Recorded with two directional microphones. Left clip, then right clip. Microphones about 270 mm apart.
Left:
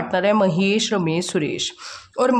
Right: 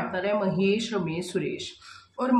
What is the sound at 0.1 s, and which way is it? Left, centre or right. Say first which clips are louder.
Speech: left 11 dB; left.